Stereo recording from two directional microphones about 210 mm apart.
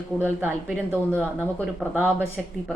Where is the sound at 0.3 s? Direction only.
10° right (ahead or behind).